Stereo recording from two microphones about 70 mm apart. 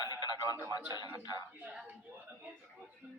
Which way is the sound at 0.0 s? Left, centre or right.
Left.